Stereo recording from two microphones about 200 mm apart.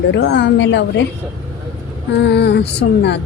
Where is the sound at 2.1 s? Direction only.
60° left (ahead or behind).